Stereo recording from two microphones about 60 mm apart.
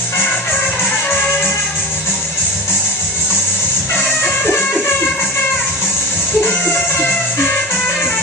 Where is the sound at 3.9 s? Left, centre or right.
Left.